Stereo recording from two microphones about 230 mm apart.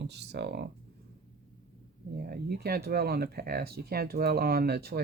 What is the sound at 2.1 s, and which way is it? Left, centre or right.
Speech, right.